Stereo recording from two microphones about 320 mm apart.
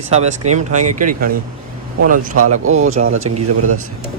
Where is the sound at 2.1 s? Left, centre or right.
Right.